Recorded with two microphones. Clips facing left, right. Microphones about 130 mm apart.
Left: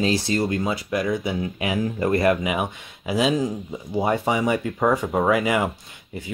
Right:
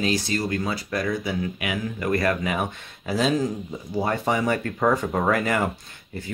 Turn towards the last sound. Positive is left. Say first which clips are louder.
# left 1 dB
turn(degrees=15)  # may be behind; listen again after turning